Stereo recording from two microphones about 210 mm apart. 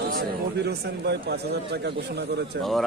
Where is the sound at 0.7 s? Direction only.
50° right (ahead or behind).